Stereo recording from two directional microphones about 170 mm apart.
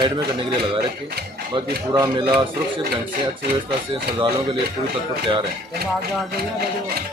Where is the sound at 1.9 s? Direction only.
20° right (ahead or behind).